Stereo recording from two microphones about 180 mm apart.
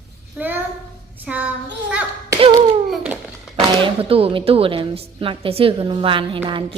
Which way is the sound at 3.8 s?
30° right (ahead or behind).